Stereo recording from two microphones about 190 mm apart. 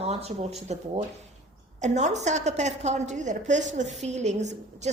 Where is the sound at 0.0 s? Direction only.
35° right (ahead or behind).